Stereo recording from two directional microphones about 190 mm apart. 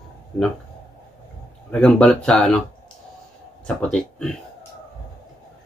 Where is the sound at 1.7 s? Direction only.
5° left (ahead or behind).